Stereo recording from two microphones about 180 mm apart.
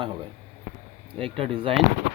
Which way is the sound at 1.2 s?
30° right (ahead or behind).